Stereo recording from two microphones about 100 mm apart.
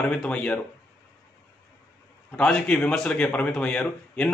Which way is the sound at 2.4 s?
10° left (ahead or behind).